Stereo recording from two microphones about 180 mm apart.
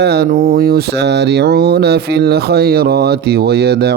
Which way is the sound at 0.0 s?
60° right (ahead or behind).